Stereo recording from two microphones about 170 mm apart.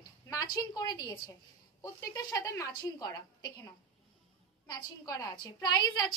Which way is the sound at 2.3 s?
15° left (ahead or behind).